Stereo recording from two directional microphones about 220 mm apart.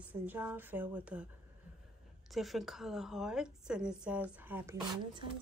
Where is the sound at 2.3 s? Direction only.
Centre (ahead or behind).